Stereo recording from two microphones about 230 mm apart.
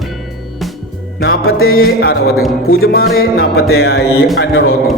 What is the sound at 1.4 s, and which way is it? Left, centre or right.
Music, left.